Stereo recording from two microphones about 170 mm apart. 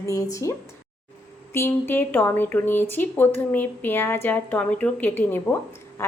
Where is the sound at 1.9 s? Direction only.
10° left (ahead or behind).